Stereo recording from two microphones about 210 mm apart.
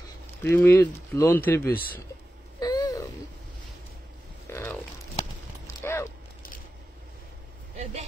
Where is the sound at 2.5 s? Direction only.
20° left (ahead or behind).